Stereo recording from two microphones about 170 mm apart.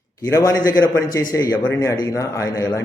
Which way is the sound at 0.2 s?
20° left (ahead or behind).